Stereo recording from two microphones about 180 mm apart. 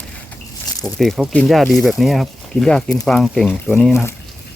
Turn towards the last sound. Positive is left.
turn(degrees=0)  # may be behind; listen again after turning